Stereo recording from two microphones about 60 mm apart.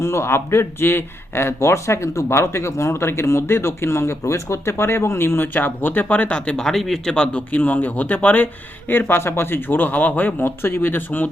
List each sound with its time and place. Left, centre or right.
0.0 s a man's voice: left
6.6 s speech: centre; by 11.3 s left